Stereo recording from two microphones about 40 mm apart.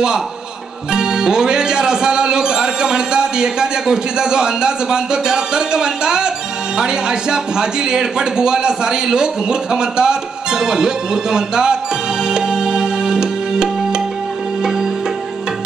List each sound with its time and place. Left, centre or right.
0.9 s a man's voice: centre
12.3 s music: centre